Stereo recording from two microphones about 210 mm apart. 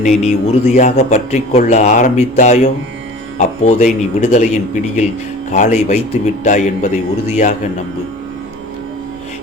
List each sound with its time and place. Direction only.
0.0 s a man's voice: 30° left (ahead or behind)